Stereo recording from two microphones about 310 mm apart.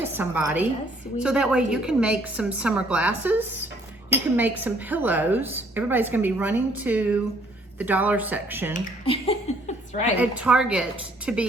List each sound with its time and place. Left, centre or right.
0.0 s a woman's voice: centre
8.8 s speech: centre
10.2 s a woman's voice: centre